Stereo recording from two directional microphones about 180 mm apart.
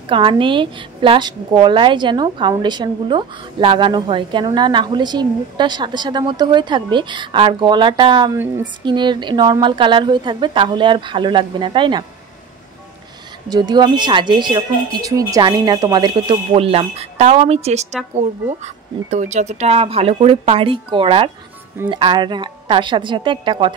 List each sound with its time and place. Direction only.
0.1 s a woman's voice: 30° right (ahead or behind)
13.5 s a woman's voice: 25° right (ahead or behind)